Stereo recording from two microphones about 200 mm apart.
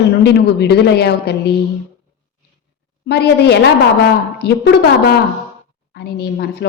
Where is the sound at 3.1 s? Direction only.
55° left (ahead or behind).